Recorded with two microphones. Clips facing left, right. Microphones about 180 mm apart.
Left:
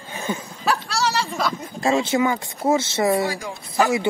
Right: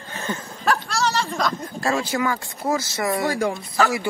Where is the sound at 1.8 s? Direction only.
20° left (ahead or behind).